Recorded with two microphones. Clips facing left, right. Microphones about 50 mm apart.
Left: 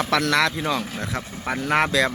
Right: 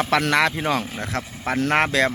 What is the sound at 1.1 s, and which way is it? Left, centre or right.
Speech, right.